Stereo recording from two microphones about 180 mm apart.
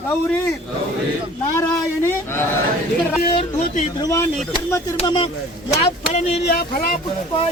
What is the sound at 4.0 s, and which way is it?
Speech, 15° left (ahead or behind).